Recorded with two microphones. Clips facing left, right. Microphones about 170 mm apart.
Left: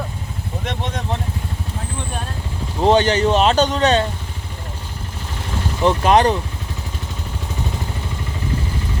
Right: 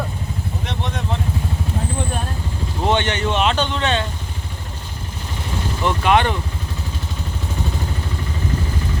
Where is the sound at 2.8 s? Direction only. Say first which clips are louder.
Left 6 dB; 35° left (ahead or behind).